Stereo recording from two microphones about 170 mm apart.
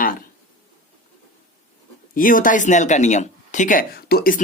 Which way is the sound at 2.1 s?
55° left (ahead or behind).